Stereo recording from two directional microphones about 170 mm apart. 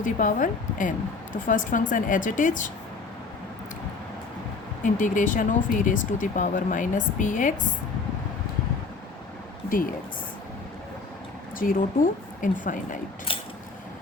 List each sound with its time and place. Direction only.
0.0 s speech: 50° left (ahead or behind)
4.8 s speech: 50° left (ahead or behind)
9.6 s speech: 55° left (ahead or behind)
11.6 s speech: 55° left (ahead or behind)